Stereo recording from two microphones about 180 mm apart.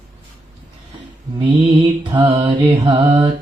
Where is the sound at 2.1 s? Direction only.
30° right (ahead or behind).